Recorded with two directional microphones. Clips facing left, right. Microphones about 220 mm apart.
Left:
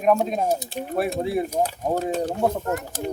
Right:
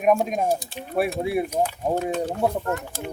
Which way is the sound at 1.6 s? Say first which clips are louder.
Even; 40° left (ahead or behind).